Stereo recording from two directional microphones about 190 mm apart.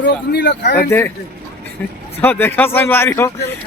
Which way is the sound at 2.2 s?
10° left (ahead or behind).